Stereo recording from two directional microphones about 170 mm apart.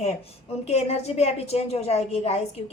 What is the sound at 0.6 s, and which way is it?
A woman's voice, 40° left (ahead or behind).